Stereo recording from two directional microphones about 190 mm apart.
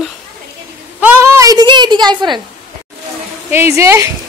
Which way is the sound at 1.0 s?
10° right (ahead or behind).